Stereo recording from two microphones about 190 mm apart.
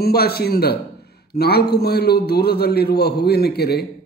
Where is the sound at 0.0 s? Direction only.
55° left (ahead or behind).